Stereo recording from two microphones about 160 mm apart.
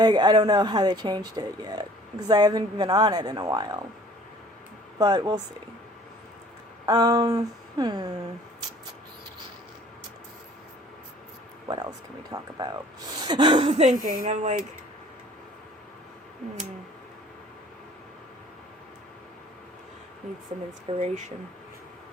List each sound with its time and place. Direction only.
0.0 s speech: 25° right (ahead or behind)
4.9 s speech: 25° right (ahead or behind)
6.8 s speech: 25° right (ahead or behind)
11.7 s speech: 25° right (ahead or behind)
14.0 s speech: 55° right (ahead or behind)
20.9 s speech: 40° right (ahead or behind)